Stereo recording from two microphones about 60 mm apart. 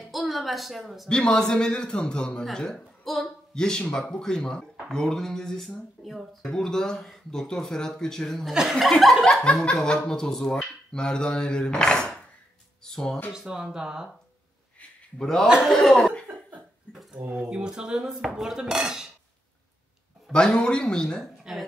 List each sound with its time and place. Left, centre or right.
0.1 s a sound: centre
1.0 s speech: centre
8.5 s speech: centre
9.2 s speech: centre
13.3 s speech: centre
14.8 s a sound: centre
15.4 s speech: centre
15.7 s speech: centre
16.9 s a sound: centre
17.3 s speech: centre
20.3 s speech: centre